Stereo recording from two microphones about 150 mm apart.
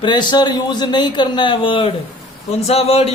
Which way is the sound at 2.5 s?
40° left (ahead or behind).